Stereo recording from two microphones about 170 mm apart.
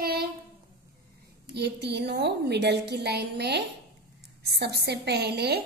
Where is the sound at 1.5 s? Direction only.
80° right.